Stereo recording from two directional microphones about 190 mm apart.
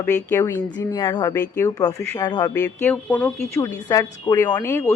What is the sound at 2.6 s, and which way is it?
A woman's voice, 10° left (ahead or behind).